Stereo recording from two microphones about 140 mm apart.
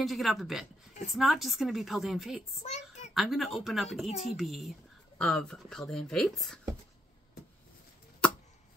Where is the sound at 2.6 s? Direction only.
55° left (ahead or behind).